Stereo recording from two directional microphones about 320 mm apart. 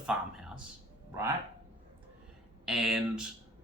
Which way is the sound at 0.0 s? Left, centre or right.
Centre.